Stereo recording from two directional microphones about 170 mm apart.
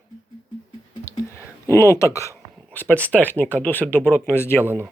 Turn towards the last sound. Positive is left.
turn(degrees=15)  # may be behind; listen again after turning